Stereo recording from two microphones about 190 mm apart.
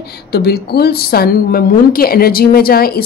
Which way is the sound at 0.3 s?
55° left (ahead or behind).